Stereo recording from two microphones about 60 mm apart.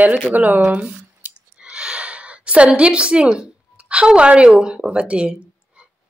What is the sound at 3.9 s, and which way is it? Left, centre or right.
A woman's voice, centre.